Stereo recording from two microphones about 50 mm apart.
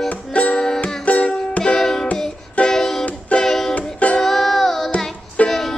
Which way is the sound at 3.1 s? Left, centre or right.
Left.